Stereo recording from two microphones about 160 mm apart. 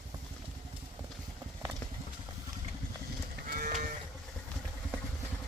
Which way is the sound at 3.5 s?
65° right (ahead or behind).